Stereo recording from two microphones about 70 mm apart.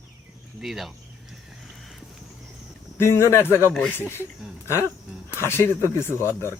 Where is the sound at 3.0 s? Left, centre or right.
Left.